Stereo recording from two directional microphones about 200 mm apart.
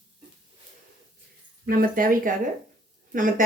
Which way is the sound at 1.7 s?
45° right (ahead or behind).